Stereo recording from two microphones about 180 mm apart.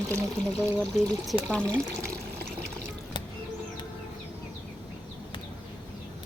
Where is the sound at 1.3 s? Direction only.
5° left (ahead or behind).